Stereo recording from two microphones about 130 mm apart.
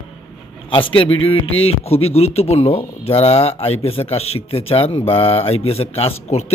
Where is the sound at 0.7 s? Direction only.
40° left (ahead or behind).